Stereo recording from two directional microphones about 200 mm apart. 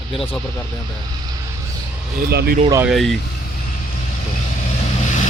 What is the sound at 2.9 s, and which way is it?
Speech, centre (ahead or behind).